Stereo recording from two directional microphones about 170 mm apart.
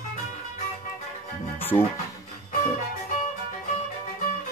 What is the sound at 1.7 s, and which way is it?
Speech, 30° left (ahead or behind).